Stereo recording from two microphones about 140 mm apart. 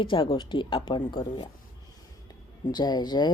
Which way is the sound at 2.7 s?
30° left (ahead or behind).